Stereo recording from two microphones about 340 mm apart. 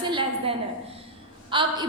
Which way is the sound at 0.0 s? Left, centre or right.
Centre.